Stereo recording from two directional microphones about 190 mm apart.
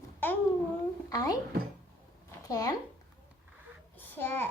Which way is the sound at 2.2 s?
15° left (ahead or behind).